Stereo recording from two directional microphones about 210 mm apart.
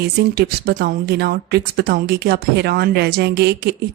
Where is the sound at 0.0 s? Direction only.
50° right (ahead or behind).